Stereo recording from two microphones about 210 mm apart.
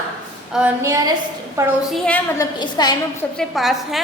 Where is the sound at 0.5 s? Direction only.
5° right (ahead or behind).